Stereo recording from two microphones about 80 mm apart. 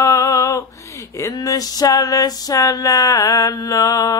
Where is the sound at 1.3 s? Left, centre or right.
Left.